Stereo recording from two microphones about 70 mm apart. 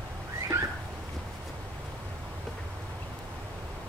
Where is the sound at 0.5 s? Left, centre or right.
Right.